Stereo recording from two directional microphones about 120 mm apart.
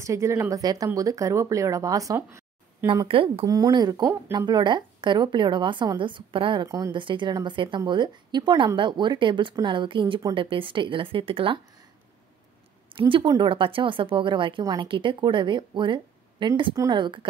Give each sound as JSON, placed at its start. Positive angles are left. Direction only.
{"t": 0.0, "sound": "speech", "side_deg": -25}
{"t": 3.1, "sound": "speech", "side_deg": -50}
{"t": 3.4, "sound": "a woman's voice", "side_deg": -35}
{"t": 6.6, "sound": "speech", "side_deg": -30}
{"t": 6.9, "sound": "a woman's voice", "side_deg": -40}
{"t": 12.9, "sound": "speech", "side_deg": -40}
{"t": 14.6, "sound": "speech", "side_deg": -30}
{"t": 14.9, "sound": "speech", "side_deg": -45}